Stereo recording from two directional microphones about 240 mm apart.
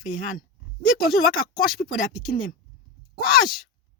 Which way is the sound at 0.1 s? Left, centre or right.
Left.